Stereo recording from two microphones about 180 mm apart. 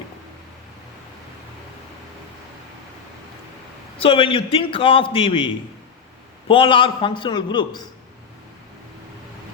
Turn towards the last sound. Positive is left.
turn(degrees=25)  # may be behind; listen again after turning